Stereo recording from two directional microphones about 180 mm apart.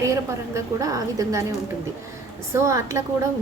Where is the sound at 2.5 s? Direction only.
15° right (ahead or behind).